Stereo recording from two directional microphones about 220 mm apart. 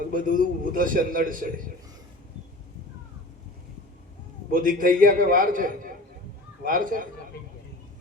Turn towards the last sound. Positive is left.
turn(degrees=-40)  # may be behind; listen again after turning